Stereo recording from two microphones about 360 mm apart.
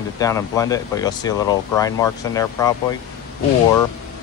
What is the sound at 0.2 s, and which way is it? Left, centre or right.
Speech, centre.